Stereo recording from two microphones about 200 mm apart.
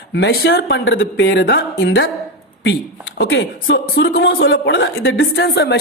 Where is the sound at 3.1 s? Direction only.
70° left (ahead or behind).